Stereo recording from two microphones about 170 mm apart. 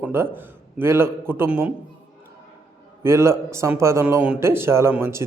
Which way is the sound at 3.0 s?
15° right (ahead or behind).